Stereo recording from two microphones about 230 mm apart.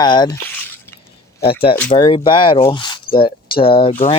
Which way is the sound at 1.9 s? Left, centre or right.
Left.